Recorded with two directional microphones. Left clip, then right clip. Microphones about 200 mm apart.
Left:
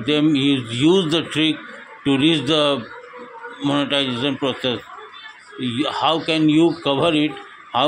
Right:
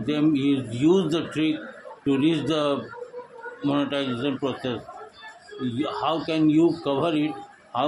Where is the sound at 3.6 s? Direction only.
15° left (ahead or behind).